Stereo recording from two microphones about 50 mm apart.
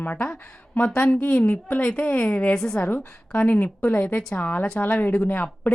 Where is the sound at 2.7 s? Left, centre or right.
Left.